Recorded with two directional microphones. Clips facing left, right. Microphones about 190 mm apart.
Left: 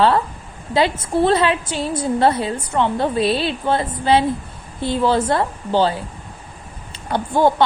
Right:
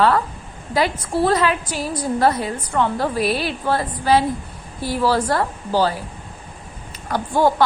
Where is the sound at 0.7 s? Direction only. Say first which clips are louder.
Left 2 dB; 25° left (ahead or behind).